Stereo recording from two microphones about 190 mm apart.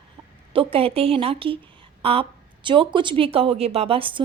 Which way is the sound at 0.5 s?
30° right (ahead or behind).